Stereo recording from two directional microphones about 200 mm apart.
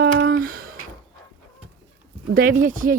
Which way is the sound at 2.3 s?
45° right (ahead or behind).